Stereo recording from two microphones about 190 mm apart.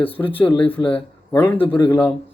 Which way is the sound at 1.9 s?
10° left (ahead or behind).